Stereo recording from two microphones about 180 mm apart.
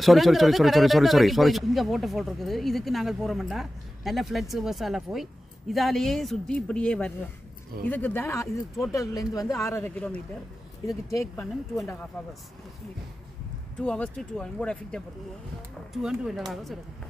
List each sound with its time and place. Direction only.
0.0 s speech: centre (ahead or behind)
8.8 s speech: centre (ahead or behind)
9.1 s speech: 20° left (ahead or behind)
11.4 s speech: centre (ahead or behind)
13.7 s speech: 5° left (ahead or behind)